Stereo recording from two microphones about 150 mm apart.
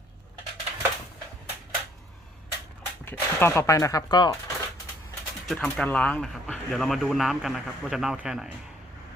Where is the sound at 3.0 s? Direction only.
15° left (ahead or behind).